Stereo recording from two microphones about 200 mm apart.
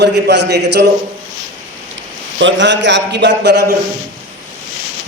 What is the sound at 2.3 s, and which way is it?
A man's voice, 65° right (ahead or behind).